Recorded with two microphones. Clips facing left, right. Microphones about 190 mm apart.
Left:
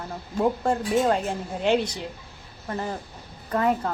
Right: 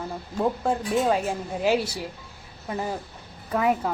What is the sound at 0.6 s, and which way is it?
Speech, centre (ahead or behind).